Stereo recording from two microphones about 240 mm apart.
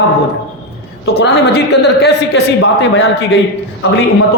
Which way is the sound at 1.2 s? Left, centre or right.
Left.